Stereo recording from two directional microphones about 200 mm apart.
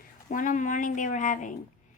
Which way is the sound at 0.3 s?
40° left (ahead or behind).